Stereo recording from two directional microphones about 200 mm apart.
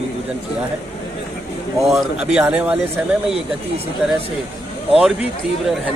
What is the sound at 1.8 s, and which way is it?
Speech, centre (ahead or behind).